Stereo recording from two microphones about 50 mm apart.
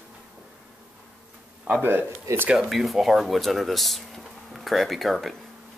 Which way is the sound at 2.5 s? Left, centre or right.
Centre.